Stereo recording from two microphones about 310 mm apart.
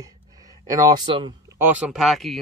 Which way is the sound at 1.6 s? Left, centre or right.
Centre.